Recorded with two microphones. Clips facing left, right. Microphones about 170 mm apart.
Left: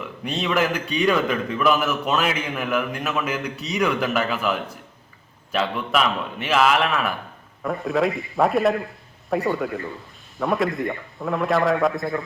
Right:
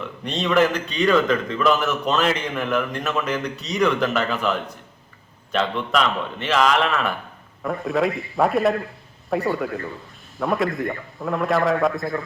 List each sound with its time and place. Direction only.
0.3 s a man's voice: 5° left (ahead or behind)